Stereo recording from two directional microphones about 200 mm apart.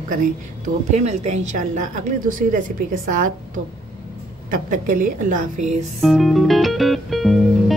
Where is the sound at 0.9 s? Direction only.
35° right (ahead or behind).